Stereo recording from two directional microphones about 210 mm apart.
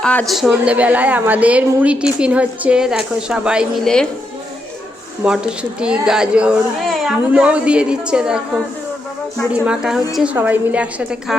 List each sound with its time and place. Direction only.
0.0 s a woman's voice: 5° left (ahead or behind)
5.2 s a woman's voice: 5° right (ahead or behind)
9.5 s a woman's voice: 5° right (ahead or behind)